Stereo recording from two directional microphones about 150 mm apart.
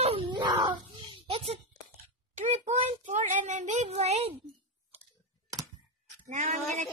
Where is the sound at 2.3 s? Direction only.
50° right (ahead or behind).